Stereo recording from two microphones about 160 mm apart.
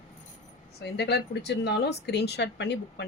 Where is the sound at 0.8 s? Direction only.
90° left.